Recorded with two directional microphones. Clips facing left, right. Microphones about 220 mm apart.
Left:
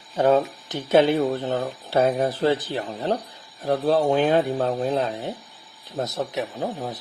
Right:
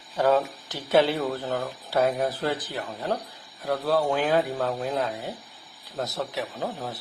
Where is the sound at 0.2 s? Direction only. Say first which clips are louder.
Left 3 dB; 20° left (ahead or behind).